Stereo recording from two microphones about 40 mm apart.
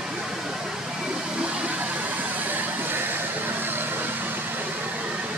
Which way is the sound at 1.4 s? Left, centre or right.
Right.